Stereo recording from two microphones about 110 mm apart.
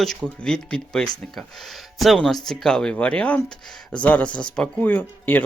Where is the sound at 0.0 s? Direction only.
5° left (ahead or behind).